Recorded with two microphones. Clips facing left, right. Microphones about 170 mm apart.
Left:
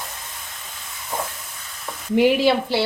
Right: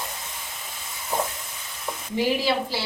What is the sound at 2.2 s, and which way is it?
Speech, 65° left (ahead or behind).